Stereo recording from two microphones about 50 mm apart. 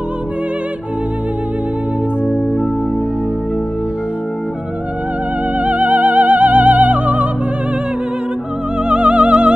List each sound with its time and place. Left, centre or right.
2.2 s music: left
5.6 s music: right
8.8 s music: right